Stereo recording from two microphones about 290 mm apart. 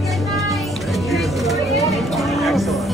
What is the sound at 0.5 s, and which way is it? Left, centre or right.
Vehicle, centre.